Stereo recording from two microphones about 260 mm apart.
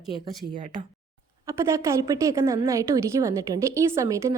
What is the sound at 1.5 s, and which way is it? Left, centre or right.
A woman's voice, centre.